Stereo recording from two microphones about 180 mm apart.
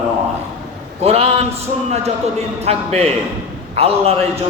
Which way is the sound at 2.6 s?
35° right (ahead or behind).